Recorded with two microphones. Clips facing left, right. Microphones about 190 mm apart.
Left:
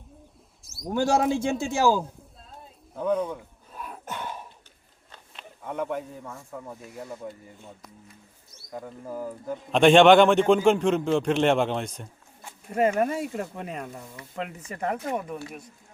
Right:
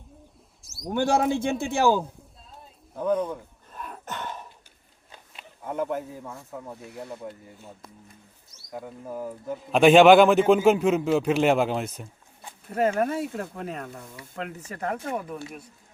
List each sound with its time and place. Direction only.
0.7 s a man's voice: centre (ahead or behind)
3.7 s a sound: 5° left (ahead or behind)
5.1 s speech: 5° right (ahead or behind)
8.7 s a man's voice: 5° right (ahead or behind)
12.7 s a man's voice: 5° left (ahead or behind)